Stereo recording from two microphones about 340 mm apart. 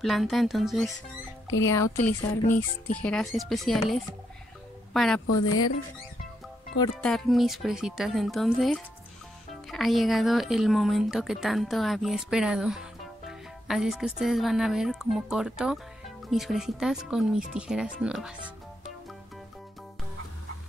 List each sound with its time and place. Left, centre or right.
0.0 s a woman's voice: centre
5.2 s speech: left
6.8 s speech: centre